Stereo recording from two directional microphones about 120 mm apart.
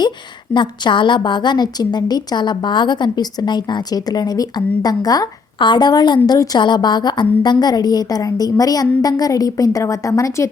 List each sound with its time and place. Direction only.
0.5 s a woman's voice: 40° left (ahead or behind); by 10.5 s 25° left (ahead or behind)